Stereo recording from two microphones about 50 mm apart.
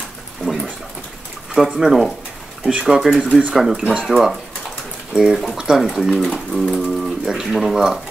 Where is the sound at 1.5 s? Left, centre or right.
Centre.